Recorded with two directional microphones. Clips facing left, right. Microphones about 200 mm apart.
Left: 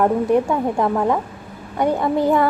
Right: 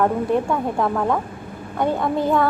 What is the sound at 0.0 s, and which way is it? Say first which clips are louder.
A woman's voice: left 3 dB; 15° left (ahead or behind).